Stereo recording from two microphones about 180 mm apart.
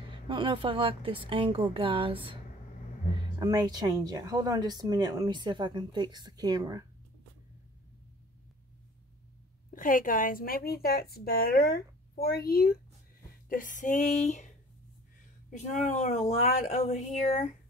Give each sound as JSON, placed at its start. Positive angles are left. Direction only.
{"t": 0.3, "sound": "speech", "side_deg": -25}
{"t": 3.3, "sound": "speech", "side_deg": -20}
{"t": 9.7, "sound": "speech", "side_deg": 50}
{"t": 13.5, "sound": "speech", "side_deg": 45}
{"t": 15.5, "sound": "speech", "side_deg": 40}